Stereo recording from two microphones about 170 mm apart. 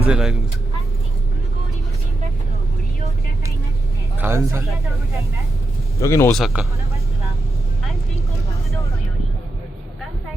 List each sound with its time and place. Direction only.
0.1 s speech: 5° right (ahead or behind)
4.2 s speech: 15° right (ahead or behind)
6.0 s speech: 15° left (ahead or behind)
6.3 s speech: centre (ahead or behind)